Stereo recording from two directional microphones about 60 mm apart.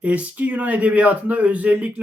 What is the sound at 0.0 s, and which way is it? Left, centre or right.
Speech, right.